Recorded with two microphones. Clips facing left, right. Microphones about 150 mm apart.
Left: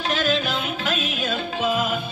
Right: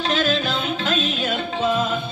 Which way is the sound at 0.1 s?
15° left (ahead or behind).